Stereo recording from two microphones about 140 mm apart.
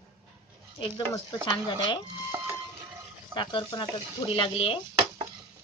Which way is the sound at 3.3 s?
35° left (ahead or behind).